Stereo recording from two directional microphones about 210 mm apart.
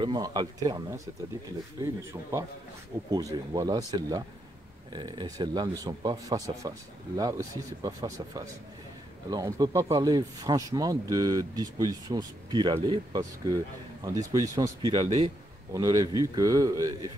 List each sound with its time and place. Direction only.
0.0 s speech: 20° right (ahead or behind)
3.1 s speech: 15° right (ahead or behind)